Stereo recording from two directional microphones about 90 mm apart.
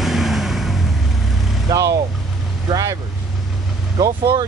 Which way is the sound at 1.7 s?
40° right (ahead or behind).